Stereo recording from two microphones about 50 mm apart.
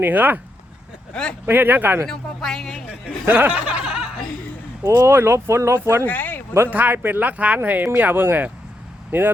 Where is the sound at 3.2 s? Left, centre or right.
Right.